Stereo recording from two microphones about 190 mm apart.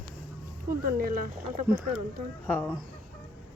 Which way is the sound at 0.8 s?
50° right (ahead or behind).